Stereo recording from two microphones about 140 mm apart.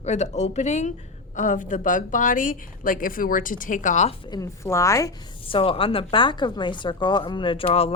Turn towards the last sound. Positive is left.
turn(degrees=45)  # may be behind; listen again after turning